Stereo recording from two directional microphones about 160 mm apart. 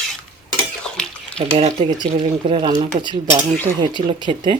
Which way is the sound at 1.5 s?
35° right (ahead or behind).